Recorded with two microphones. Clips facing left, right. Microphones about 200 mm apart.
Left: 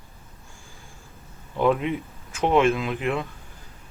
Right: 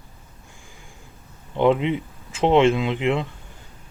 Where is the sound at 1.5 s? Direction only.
20° right (ahead or behind).